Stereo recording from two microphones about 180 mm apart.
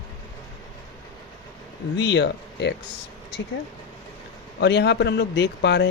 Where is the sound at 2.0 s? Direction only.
75° left (ahead or behind).